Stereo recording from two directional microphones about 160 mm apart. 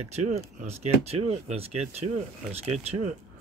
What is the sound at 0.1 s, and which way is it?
Speech, 45° right (ahead or behind).